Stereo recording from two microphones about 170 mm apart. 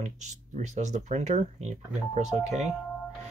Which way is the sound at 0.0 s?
45° right (ahead or behind).